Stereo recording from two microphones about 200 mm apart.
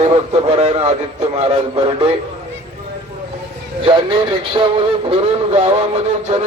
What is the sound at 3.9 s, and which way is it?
Speech, 25° right (ahead or behind).